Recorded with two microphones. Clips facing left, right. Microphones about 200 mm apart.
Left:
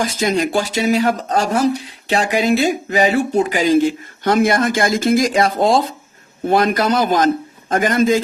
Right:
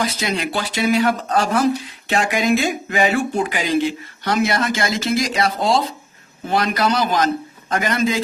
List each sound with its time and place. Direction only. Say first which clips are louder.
0.0 s speech: left 5 dB; 45° left (ahead or behind)